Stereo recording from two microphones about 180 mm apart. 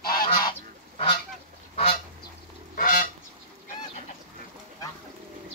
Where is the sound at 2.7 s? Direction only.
50° left (ahead or behind).